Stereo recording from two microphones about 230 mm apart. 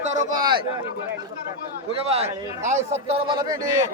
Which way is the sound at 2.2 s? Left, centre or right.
Right.